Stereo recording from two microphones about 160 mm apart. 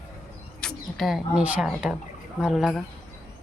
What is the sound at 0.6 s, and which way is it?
Speech, 5° left (ahead or behind).